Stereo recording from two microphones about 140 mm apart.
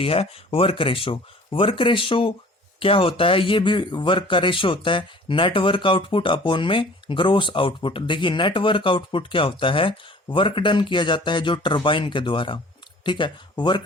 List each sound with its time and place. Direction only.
0.0 s speech: 40° left (ahead or behind)